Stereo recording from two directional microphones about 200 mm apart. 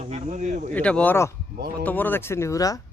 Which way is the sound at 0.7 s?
5° left (ahead or behind).